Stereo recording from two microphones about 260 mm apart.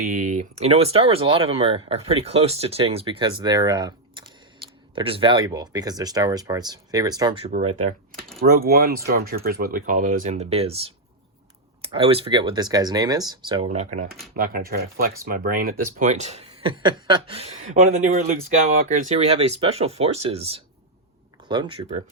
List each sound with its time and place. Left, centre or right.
0.1 s speech: right
8.4 s speech: right